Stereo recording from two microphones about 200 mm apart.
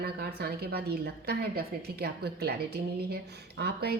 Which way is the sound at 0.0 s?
50° right (ahead or behind).